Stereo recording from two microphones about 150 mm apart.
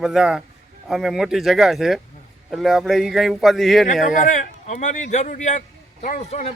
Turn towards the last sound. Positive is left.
turn(degrees=45)  # may be behind; listen again after turning